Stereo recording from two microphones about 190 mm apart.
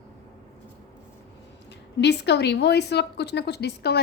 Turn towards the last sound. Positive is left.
turn(degrees=60)  # may be behind; listen again after turning